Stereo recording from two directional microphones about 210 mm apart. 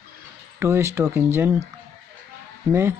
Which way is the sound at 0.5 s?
10° right (ahead or behind).